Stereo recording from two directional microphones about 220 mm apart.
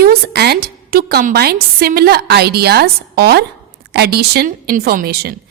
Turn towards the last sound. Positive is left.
turn(degrees=-45)  # may be behind; listen again after turning